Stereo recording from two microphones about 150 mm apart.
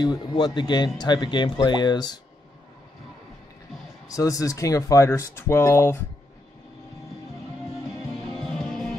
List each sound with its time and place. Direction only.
0.0 s speech: 30° left (ahead or behind)
4.1 s speech: 25° left (ahead or behind)
8.1 s music: 5° left (ahead or behind)